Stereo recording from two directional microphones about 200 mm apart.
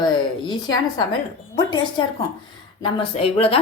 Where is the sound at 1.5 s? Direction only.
20° left (ahead or behind).